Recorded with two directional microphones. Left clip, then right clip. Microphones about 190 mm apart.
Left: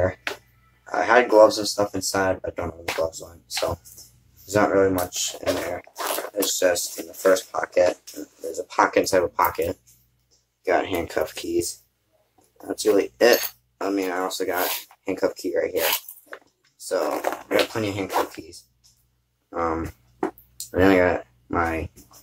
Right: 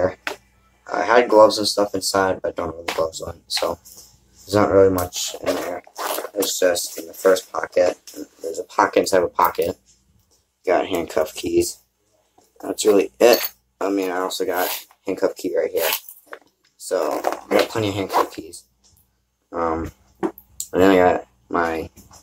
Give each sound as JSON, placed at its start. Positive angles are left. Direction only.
{"t": 0.0, "sound": "a sound", "side_deg": 0}
{"t": 0.8, "sound": "speech", "side_deg": 0}
{"t": 10.6, "sound": "speech", "side_deg": -10}